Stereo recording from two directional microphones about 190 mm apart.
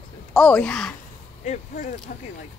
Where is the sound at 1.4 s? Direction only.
45° left (ahead or behind).